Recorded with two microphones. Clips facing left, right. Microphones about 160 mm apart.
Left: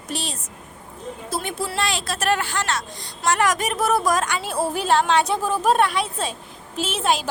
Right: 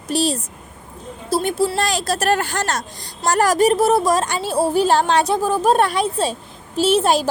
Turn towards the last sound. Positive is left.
turn(degrees=-35)  # may be behind; listen again after turning